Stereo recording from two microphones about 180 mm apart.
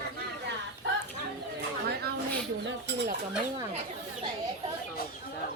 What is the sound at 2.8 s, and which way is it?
Dishes, 70° right (ahead or behind).